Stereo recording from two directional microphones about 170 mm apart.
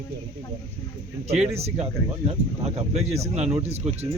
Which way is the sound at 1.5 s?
35° right (ahead or behind).